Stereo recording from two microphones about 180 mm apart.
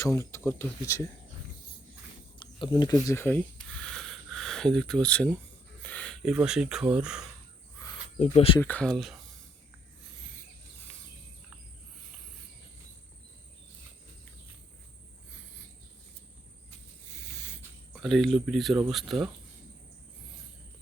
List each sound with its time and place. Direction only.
0.0 s speech: 15° left (ahead or behind)
2.4 s a sound: 25° left (ahead or behind); by 5.4 s 5° left (ahead or behind)
5.8 s speech: 5° left (ahead or behind)
8.2 s speech: 35° left (ahead or behind)
8.6 s speech: 5° left (ahead or behind)
17.9 s speech: centre (ahead or behind)